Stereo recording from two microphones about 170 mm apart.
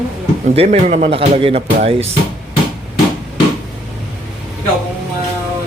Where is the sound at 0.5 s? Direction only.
35° right (ahead or behind).